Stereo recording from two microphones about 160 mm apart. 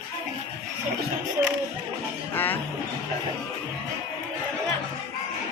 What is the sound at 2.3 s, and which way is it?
Music, 10° left (ahead or behind).